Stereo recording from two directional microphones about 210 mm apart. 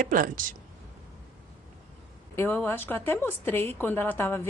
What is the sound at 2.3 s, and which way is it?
A woman's voice, 10° left (ahead or behind).